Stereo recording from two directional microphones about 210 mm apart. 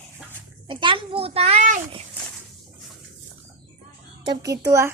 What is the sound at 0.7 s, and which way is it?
A child's voice, 25° right (ahead or behind).